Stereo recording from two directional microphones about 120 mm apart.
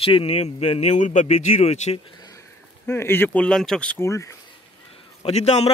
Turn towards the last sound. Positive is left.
turn(degrees=65)  # may be behind; listen again after turning